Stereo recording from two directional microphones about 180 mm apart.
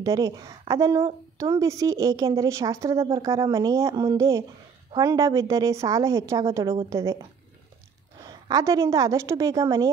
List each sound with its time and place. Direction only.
0.0 s a woman's voice: 20° right (ahead or behind)
8.5 s a woman's voice: 20° right (ahead or behind)